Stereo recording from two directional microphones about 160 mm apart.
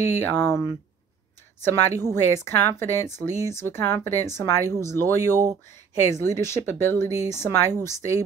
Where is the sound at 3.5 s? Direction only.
15° left (ahead or behind).